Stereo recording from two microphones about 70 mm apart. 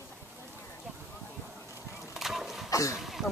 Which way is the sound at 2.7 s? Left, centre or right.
Left.